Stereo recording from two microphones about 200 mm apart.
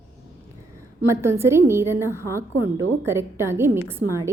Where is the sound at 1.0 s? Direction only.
15° right (ahead or behind).